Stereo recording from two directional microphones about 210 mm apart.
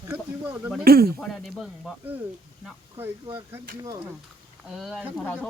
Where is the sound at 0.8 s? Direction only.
45° right (ahead or behind).